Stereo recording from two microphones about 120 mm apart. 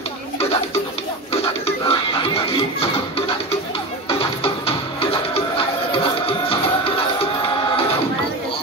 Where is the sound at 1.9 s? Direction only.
50° left (ahead or behind).